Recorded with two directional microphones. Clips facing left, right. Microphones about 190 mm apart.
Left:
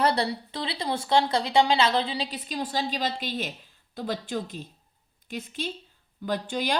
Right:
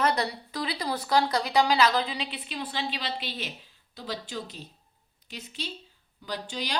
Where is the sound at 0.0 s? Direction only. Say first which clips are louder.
Left 2 dB; 30° left (ahead or behind).